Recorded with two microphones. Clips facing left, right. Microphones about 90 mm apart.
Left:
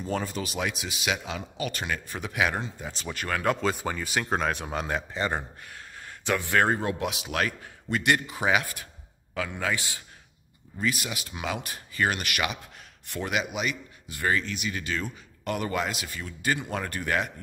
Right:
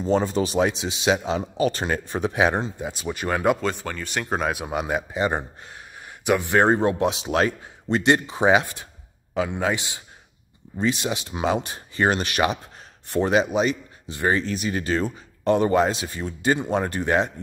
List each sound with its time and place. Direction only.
0.0 s speech: 25° right (ahead or behind)
2.9 s speech: 15° right (ahead or behind)
3.6 s speech: 5° left (ahead or behind); by 14.4 s 25° right (ahead or behind)
14.4 s speech: 40° right (ahead or behind)